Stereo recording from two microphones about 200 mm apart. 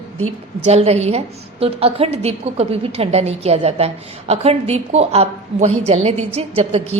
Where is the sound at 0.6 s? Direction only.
30° right (ahead or behind).